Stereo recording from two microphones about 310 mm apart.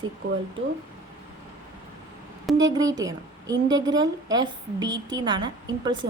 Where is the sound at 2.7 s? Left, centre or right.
Centre.